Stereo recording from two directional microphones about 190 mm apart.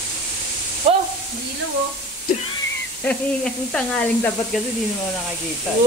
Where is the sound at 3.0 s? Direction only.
5° left (ahead or behind).